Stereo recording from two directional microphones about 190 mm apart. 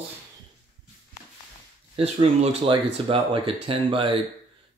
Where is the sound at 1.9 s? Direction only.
30° right (ahead or behind).